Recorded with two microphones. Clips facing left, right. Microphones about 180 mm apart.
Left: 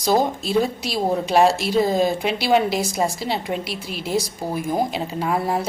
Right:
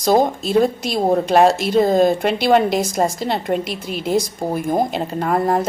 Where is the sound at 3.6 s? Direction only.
50° right (ahead or behind).